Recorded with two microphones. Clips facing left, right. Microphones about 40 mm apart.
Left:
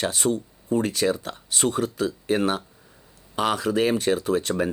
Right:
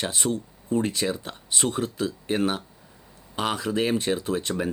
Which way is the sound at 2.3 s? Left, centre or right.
Centre.